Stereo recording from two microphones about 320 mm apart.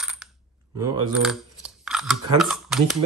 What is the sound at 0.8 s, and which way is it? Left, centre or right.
Speech, centre.